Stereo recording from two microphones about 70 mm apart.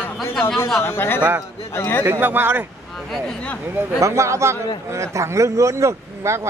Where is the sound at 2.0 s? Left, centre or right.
Right.